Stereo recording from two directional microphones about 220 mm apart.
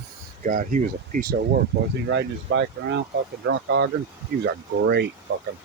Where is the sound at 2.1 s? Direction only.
55° right (ahead or behind).